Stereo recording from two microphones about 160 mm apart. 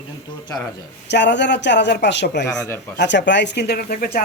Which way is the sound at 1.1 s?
90° left.